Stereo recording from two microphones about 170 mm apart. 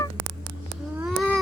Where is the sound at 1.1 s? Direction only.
Centre (ahead or behind).